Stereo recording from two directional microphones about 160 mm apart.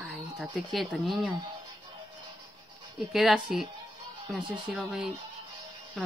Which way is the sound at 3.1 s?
5° right (ahead or behind).